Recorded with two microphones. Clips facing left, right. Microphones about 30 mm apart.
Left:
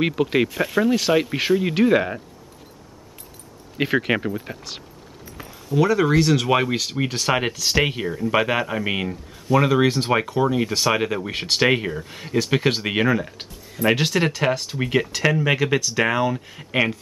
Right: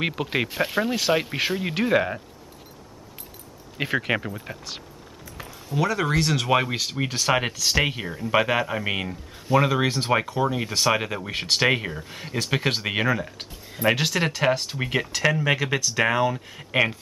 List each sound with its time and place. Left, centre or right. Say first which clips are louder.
0.0 s speech: left 5 dB; centre
0.6 s speech: left 4 dB; centre
1.6 s speech: left 2 dB; centre
3.7 s speech: left 4 dB; centre